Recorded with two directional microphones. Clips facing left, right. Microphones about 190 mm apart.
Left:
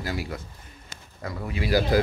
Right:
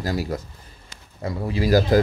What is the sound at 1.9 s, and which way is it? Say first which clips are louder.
Speech: right 4 dB; 45° right (ahead or behind).